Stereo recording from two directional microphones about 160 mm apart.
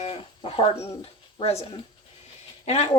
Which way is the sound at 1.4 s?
40° left (ahead or behind).